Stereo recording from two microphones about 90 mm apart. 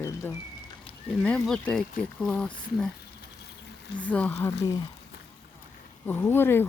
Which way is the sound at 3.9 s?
15° left (ahead or behind).